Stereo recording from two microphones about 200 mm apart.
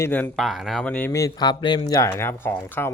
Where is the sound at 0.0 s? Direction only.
10° left (ahead or behind).